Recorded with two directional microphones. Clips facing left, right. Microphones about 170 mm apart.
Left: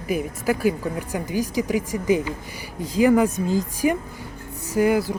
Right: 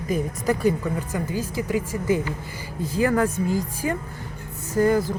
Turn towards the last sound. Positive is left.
turn(degrees=10)  # may be behind; listen again after turning